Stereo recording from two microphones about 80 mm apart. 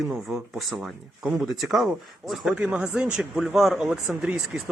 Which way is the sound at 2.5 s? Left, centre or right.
Centre.